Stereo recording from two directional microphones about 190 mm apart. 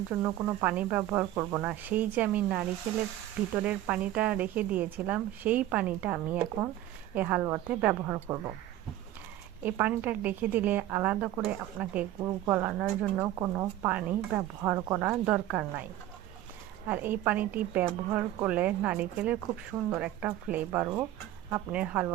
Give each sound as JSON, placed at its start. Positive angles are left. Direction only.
{"t": 0.2, "sound": "speech", "side_deg": -15}
{"t": 9.6, "sound": "speech", "side_deg": -10}
{"t": 14.9, "sound": "speech", "side_deg": -5}
{"t": 16.9, "sound": "speech", "side_deg": -10}